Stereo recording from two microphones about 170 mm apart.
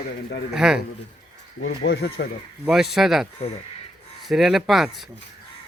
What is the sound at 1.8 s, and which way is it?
Speech, 70° left (ahead or behind).